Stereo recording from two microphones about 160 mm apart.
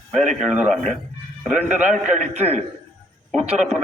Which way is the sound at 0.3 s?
50° right (ahead or behind).